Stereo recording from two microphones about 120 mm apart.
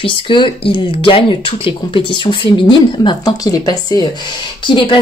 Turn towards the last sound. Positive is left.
turn(degrees=45)  # may be behind; listen again after turning